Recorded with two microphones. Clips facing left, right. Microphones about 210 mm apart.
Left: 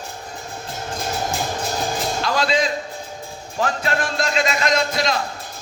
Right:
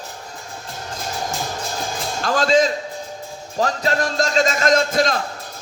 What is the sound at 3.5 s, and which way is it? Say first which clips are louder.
Music: right 2 dB; 35° right (ahead or behind).